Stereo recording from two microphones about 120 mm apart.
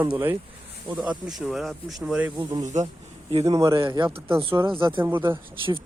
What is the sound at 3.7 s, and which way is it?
Speech, 45° right (ahead or behind).